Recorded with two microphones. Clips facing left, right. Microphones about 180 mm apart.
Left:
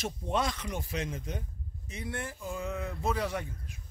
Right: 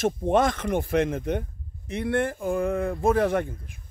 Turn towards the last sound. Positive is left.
turn(degrees=-55)  # may be behind; listen again after turning